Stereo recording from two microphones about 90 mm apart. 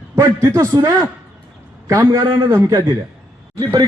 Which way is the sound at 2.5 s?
30° right (ahead or behind).